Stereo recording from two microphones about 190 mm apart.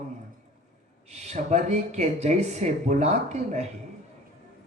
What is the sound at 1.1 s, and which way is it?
Speech, 35° right (ahead or behind).